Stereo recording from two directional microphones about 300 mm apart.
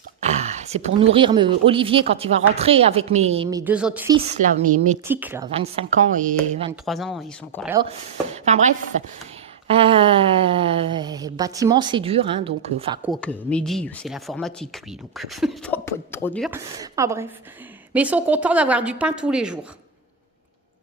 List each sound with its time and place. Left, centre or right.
0.2 s a woman's voice: right
3.6 s speech: centre
4.3 s a woman's voice: right
5.0 s speech: centre
5.5 s a woman's voice: centre
6.8 s speech: centre
7.8 s a woman's voice: right
13.1 s speech: centre
16.5 s speech: centre